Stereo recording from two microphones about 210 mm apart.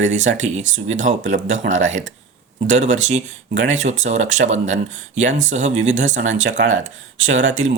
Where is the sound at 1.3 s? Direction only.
35° right (ahead or behind).